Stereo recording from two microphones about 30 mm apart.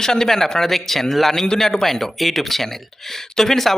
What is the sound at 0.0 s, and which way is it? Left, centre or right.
A man's voice, centre.